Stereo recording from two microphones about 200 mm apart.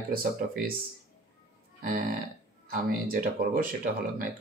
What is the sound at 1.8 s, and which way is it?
Speech, 45° right (ahead or behind).